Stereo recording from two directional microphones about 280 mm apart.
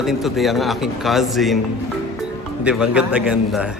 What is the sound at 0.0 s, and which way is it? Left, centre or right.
A man's voice, centre.